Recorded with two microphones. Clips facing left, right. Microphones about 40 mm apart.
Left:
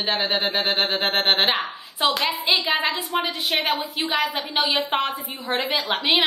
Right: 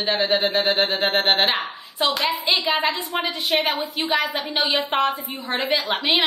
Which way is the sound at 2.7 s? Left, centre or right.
Centre.